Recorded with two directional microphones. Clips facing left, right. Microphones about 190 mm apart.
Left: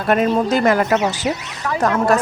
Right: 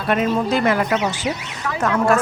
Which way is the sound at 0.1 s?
45° left (ahead or behind).